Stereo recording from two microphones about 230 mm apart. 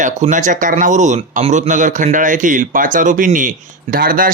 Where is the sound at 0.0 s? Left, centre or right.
Right.